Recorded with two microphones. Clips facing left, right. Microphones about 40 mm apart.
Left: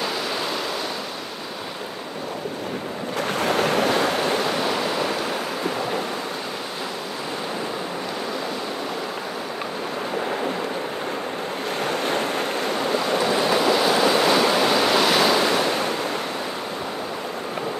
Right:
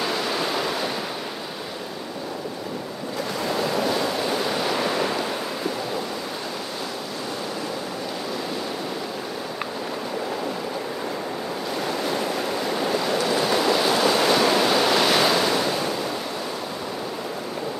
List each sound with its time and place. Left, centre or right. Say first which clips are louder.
0.0 s waves: right 1 dB; centre
3.2 s waves: left 4 dB; left
11.9 s waves: left 2 dB; left
13.2 s waves: left 2 dB; centre